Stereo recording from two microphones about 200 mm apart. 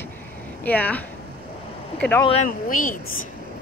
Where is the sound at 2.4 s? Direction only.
40° left (ahead or behind).